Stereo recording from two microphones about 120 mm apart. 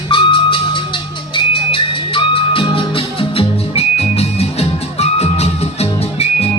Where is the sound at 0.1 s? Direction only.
45° left (ahead or behind).